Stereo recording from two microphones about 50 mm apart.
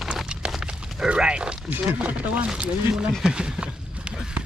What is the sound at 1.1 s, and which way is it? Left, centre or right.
Speech, centre.